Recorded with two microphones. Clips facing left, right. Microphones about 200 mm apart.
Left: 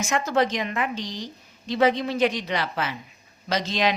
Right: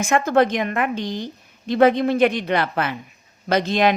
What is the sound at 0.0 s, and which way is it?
A woman's voice, 55° right (ahead or behind).